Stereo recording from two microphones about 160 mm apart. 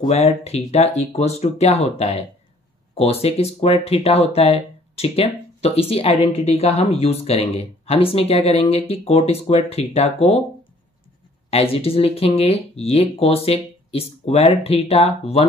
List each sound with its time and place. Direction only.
0.0 s speech: 40° left (ahead or behind)
11.5 s speech: 40° left (ahead or behind)